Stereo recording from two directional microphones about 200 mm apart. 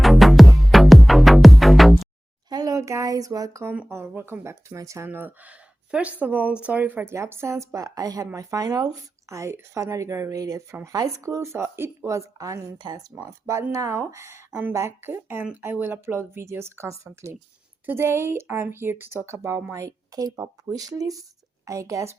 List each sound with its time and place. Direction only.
0.0 s music: centre (ahead or behind)
2.5 s speech: 20° right (ahead or behind)